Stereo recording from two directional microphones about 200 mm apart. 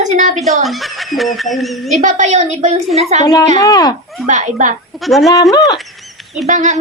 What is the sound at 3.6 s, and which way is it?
Speech, 20° left (ahead or behind).